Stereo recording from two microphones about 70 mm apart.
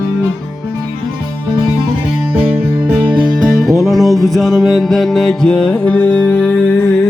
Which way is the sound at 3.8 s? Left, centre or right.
Centre.